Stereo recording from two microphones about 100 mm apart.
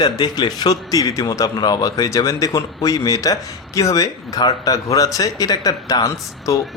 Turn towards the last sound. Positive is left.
turn(degrees=35)  # may be behind; listen again after turning